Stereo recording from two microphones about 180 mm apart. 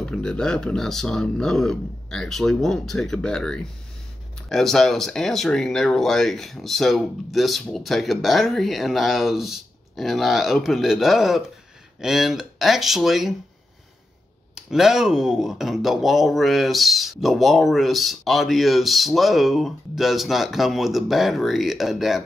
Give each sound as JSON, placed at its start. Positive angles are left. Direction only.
{"t": 0.0, "sound": "speech", "side_deg": 5}
{"t": 14.5, "sound": "speech", "side_deg": 0}